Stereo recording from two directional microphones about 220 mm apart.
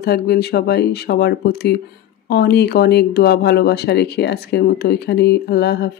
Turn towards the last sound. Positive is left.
turn(degrees=50)  # may be behind; listen again after turning